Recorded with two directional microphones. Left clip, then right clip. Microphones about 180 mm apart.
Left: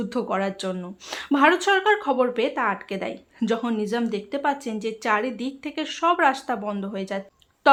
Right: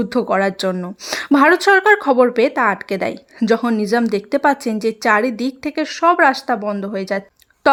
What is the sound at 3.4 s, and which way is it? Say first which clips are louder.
Speech: right 9 dB; 25° right (ahead or behind).